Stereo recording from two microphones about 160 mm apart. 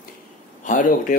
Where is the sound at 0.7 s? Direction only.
55° left (ahead or behind).